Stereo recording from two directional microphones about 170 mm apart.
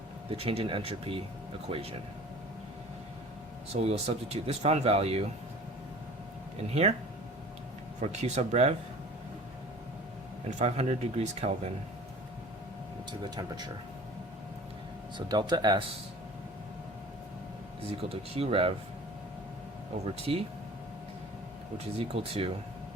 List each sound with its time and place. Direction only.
0.3 s speech: 35° right (ahead or behind)
3.7 s speech: 40° right (ahead or behind)
8.0 s speech: 40° right (ahead or behind)
10.6 s speech: 40° right (ahead or behind)
13.1 s speech: 25° right (ahead or behind)
15.3 s speech: 25° right (ahead or behind)
17.9 s speech: 35° right (ahead or behind)
20.3 s speech: 35° right (ahead or behind)
21.9 s speech: 35° right (ahead or behind)